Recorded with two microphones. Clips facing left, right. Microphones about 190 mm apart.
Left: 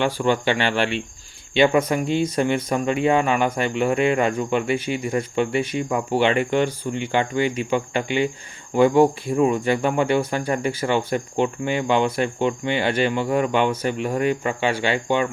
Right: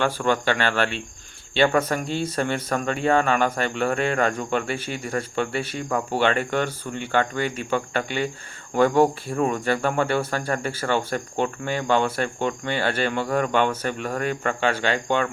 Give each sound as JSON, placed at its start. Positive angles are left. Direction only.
{"t": 0.0, "sound": "speech", "side_deg": 15}